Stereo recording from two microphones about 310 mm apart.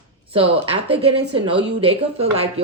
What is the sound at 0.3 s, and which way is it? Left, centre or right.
Speech, centre.